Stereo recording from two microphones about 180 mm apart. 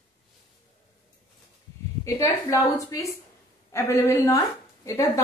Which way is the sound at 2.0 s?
15° left (ahead or behind).